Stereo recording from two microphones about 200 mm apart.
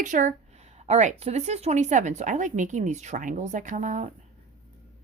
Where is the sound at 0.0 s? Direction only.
40° right (ahead or behind).